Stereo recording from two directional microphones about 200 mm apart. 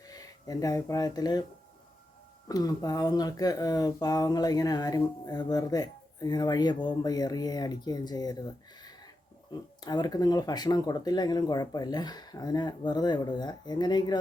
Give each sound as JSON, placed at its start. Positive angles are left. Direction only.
{"t": 0.0, "sound": "speech", "side_deg": 20}
{"t": 2.5, "sound": "speech", "side_deg": 20}
{"t": 9.5, "sound": "speech", "side_deg": 20}